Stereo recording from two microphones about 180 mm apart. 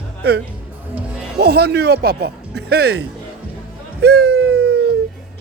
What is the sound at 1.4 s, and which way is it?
Speech, 60° right (ahead or behind).